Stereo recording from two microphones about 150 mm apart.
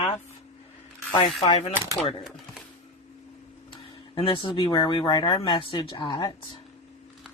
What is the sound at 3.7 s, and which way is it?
Speech, 35° left (ahead or behind).